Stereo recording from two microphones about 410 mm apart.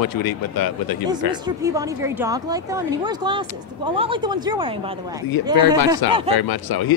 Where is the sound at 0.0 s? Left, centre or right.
Left.